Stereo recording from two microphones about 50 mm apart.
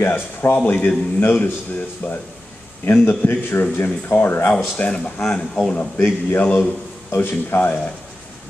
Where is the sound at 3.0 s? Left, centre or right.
Left.